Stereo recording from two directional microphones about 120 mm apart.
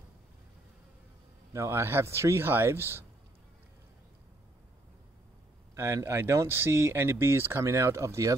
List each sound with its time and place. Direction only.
1.5 s speech: 25° right (ahead or behind)
5.8 s speech: 20° right (ahead or behind)